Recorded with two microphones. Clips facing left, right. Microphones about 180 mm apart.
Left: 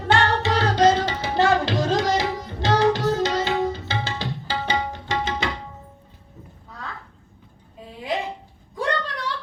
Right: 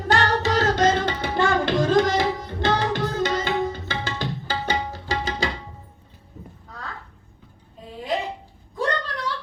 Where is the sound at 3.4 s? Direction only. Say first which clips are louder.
Left 2 dB; 50° right (ahead or behind); by 5.4 s 35° right (ahead or behind).